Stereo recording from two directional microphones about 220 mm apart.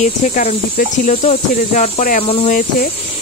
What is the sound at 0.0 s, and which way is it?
Speech, 35° left (ahead or behind).